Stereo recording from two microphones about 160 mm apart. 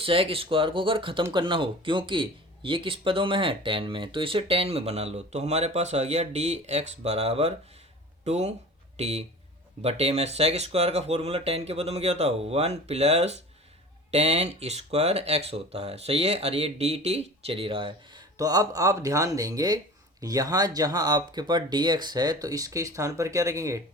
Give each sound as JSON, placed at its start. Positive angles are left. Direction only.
{"t": 0.0, "sound": "speech", "side_deg": -35}
{"t": 18.3, "sound": "speech", "side_deg": -20}